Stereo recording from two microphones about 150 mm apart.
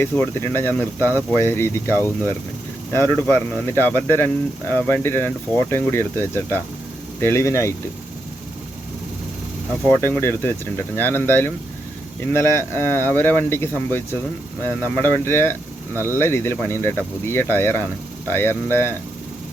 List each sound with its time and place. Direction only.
0.0 s speech: 15° left (ahead or behind)
9.9 s speech: 15° left (ahead or behind)